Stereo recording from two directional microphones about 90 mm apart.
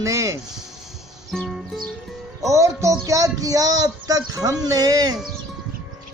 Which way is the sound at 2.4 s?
35° right (ahead or behind).